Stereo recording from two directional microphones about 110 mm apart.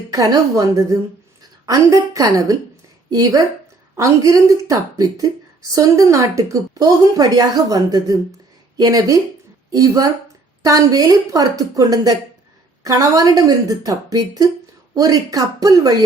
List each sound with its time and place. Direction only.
0.1 s a woman's voice: 30° right (ahead or behind)